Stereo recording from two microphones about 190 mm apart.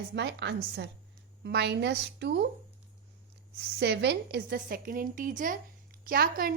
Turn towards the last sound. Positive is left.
turn(degrees=-50)  # may be behind; listen again after turning